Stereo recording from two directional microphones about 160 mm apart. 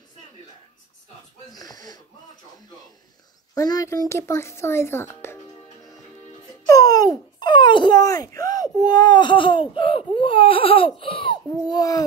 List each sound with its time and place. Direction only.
1.5 s wheeze: 25° left (ahead or behind)
3.5 s a child's voice: 20° left (ahead or behind)
6.7 s a sound: 20° left (ahead or behind)
8.8 s baby cry: 25° left (ahead or behind)